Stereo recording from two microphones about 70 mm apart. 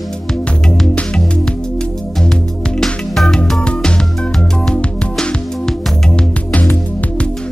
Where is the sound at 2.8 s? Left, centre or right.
Centre; by 7.2 s left.